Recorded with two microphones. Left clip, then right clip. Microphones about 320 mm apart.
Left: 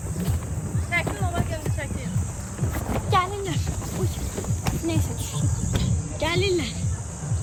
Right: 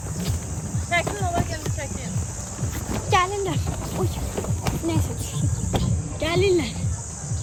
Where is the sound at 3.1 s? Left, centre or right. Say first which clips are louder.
Right 2 dB; right.